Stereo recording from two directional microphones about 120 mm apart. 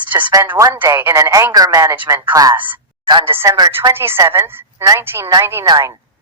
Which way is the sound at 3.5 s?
35° right (ahead or behind).